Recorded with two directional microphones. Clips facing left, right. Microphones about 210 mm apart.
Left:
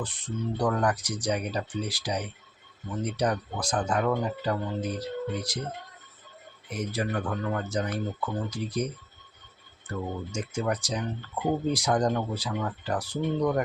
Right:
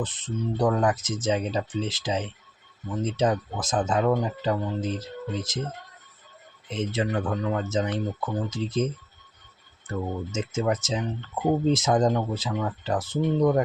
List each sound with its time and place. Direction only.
0.0 s speech: 20° right (ahead or behind)
6.7 s speech: 25° right (ahead or behind)
10.3 s speech: 25° right (ahead or behind)